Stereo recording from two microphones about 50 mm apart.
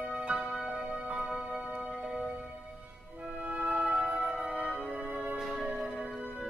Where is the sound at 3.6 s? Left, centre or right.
Right.